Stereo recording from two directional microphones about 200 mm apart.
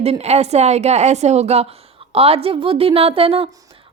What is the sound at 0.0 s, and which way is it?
A woman's voice, 30° right (ahead or behind).